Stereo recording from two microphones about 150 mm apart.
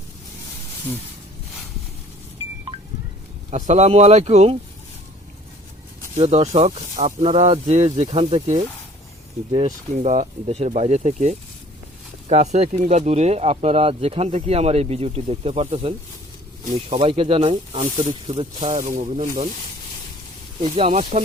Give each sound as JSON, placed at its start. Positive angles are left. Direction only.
{"t": 3.5, "sound": "speech", "side_deg": -50}
{"t": 6.1, "sound": "speech", "side_deg": -45}
{"t": 9.6, "sound": "speech", "side_deg": -55}
{"t": 17.7, "sound": "speech", "side_deg": -60}
{"t": 18.1, "sound": "speech", "side_deg": -35}
{"t": 18.8, "sound": "speech", "side_deg": -55}
{"t": 20.6, "sound": "speech", "side_deg": -40}